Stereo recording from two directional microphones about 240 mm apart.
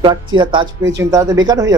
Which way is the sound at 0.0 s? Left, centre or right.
Centre.